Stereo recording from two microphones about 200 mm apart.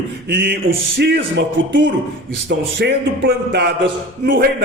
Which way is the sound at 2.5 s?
55° right (ahead or behind).